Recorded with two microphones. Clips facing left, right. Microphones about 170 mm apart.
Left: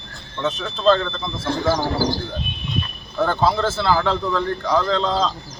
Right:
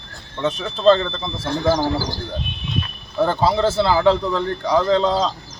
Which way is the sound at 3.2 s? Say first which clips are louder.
Right 2 dB; 15° right (ahead or behind).